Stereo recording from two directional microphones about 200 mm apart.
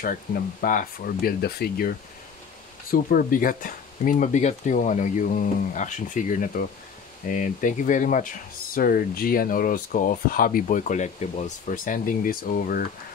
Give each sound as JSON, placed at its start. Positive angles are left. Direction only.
{"t": 0.0, "sound": "speech", "side_deg": 45}
{"t": 2.9, "sound": "speech", "side_deg": 45}